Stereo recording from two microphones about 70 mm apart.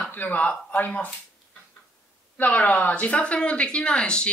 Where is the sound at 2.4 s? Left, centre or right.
Left.